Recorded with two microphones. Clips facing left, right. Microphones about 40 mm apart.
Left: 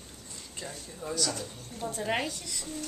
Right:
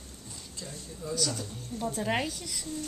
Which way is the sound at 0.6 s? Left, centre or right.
Left.